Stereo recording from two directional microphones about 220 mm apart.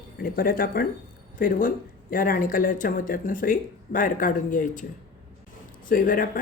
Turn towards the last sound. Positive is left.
turn(degrees=40)  # may be behind; listen again after turning